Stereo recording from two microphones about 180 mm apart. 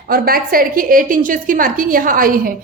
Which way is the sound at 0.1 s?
55° right (ahead or behind).